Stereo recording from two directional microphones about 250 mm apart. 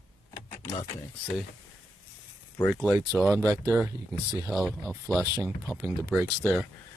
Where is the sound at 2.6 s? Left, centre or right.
Centre.